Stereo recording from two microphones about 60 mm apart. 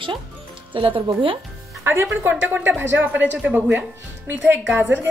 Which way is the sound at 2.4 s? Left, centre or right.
Right.